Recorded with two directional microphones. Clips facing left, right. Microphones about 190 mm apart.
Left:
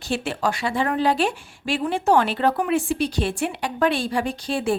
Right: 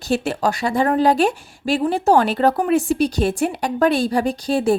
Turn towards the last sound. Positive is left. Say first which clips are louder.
# right 6 dB
turn(degrees=-40)  # may be behind; listen again after turning